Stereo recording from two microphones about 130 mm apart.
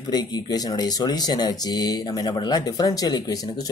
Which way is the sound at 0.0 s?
30° left (ahead or behind).